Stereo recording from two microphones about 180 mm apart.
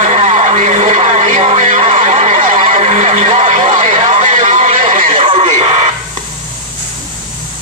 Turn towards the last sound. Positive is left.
turn(degrees=-35)  # may be behind; listen again after turning